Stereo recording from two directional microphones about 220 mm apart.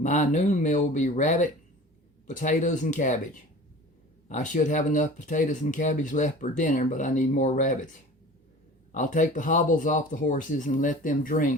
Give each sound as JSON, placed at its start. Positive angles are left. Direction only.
{"t": 0.0, "sound": "speech", "side_deg": 35}
{"t": 8.9, "sound": "speech", "side_deg": 35}